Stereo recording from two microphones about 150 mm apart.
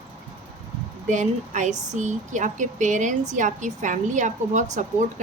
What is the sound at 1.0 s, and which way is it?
A woman's voice, 55° right (ahead or behind).